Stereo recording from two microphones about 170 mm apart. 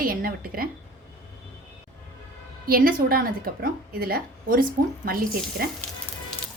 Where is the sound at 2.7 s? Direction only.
60° right (ahead or behind).